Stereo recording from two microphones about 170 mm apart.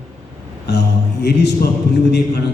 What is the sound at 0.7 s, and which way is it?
Speech, 80° left.